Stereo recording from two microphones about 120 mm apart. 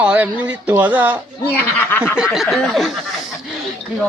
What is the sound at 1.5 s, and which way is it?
Speech, 15° left (ahead or behind).